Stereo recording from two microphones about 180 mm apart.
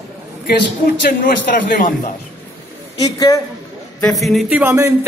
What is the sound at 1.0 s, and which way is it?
Speech, 50° left (ahead or behind).